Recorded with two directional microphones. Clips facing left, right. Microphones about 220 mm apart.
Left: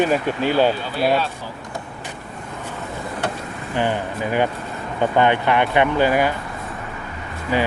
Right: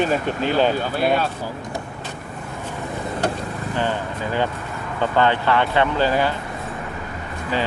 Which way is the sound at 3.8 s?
15° left (ahead or behind).